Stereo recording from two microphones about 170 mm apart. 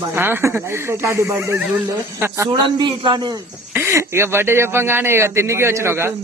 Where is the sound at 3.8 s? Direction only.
15° right (ahead or behind).